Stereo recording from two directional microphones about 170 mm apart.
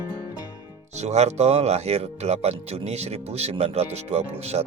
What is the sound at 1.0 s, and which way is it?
Speech, 40° right (ahead or behind).